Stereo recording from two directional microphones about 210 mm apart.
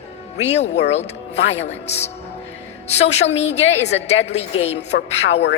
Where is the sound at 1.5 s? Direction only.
30° left (ahead or behind).